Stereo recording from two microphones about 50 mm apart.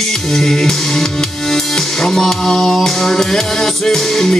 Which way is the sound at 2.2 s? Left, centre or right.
Centre.